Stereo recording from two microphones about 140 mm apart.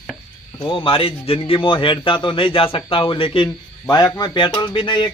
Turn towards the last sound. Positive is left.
turn(degrees=35)  # may be behind; listen again after turning